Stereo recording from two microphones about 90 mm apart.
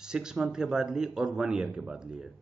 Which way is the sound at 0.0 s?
5° right (ahead or behind).